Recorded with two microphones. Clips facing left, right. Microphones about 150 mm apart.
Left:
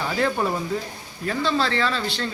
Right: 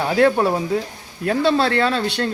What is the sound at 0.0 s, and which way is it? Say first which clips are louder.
Speech: right 7 dB; 65° right (ahead or behind).